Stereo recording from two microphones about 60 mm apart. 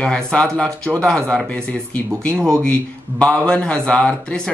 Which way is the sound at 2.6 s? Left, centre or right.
Centre.